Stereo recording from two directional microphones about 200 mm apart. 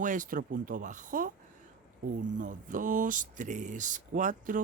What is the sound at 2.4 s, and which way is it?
Speech, 40° right (ahead or behind).